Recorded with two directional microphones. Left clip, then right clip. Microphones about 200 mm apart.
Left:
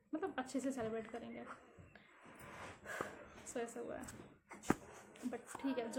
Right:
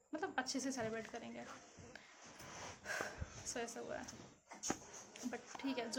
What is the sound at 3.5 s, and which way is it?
Speech, centre (ahead or behind).